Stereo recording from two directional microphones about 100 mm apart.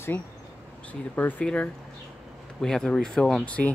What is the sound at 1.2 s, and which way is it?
Speech, 15° left (ahead or behind).